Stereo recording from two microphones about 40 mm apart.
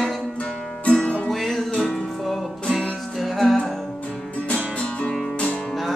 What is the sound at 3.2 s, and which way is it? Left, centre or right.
Music, centre.